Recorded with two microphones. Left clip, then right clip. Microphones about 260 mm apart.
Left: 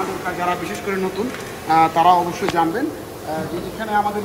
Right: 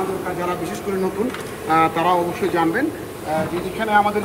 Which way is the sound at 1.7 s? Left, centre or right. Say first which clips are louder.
Left 3 dB; centre.